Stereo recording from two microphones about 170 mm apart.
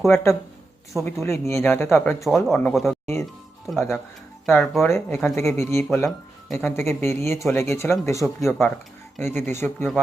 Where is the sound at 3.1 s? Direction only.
15° left (ahead or behind).